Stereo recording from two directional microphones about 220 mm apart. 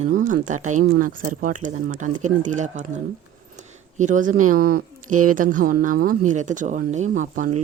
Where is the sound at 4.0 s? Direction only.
35° right (ahead or behind).